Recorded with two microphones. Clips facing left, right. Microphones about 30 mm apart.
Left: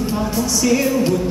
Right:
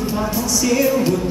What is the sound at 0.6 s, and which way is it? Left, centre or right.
Music, centre.